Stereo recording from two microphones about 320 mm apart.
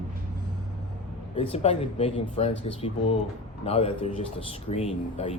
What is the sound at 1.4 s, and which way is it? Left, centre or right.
Speech, centre.